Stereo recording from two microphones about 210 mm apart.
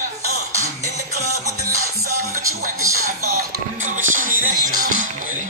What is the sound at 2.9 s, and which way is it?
Music, 90° right.